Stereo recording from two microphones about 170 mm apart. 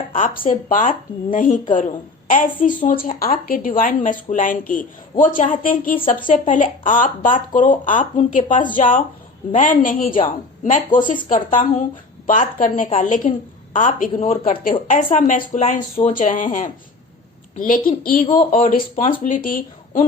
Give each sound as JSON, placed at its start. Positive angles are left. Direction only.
{"t": 0.7, "sound": "a woman's voice", "side_deg": 50}